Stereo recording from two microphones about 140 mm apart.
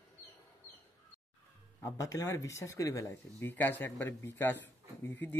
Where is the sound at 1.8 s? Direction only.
20° left (ahead or behind).